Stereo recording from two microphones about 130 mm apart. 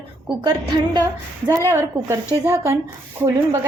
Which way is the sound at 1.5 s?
25° right (ahead or behind).